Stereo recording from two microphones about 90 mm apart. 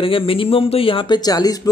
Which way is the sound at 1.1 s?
45° left (ahead or behind).